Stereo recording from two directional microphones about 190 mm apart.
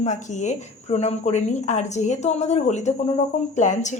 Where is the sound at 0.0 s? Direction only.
40° left (ahead or behind).